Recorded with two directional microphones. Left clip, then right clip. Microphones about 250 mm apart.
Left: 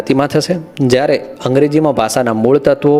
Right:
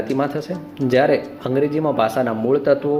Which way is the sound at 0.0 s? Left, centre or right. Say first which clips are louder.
Left 8 dB; left.